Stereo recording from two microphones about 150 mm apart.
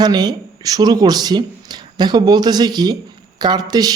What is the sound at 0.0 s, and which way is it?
Speech, 25° right (ahead or behind).